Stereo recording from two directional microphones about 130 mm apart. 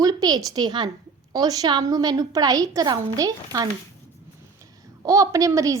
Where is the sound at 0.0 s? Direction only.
30° right (ahead or behind).